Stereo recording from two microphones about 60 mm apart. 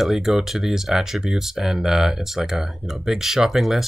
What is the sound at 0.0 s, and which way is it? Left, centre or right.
Speech, centre.